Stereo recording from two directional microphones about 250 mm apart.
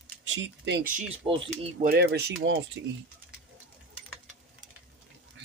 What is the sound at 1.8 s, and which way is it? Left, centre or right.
Stir, right.